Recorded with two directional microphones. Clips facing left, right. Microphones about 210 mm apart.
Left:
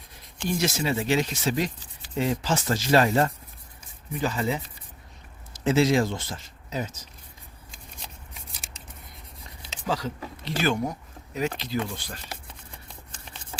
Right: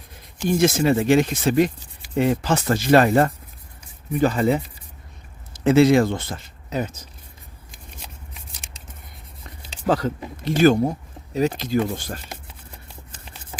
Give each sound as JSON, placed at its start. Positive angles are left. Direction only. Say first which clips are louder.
{"t": 0.4, "sound": "speech", "louder": "right 8 dB", "side_deg": -50}
{"t": 7.9, "sound": "shuffling cards", "louder": "right 2 dB", "side_deg": 0}
{"t": 9.8, "sound": "speech", "louder": "right 8 dB", "side_deg": -55}
{"t": 10.4, "sound": "speech", "louder": "right 10 dB", "side_deg": -45}
{"t": 12.5, "sound": "a sound", "louder": "right 2 dB", "side_deg": -5}